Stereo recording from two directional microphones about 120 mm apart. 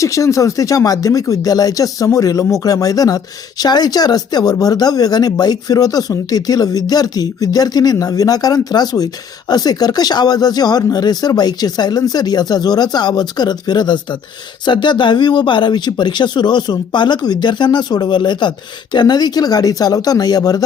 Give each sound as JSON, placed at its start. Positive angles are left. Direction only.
{"t": 0.0, "sound": "speech", "side_deg": 25}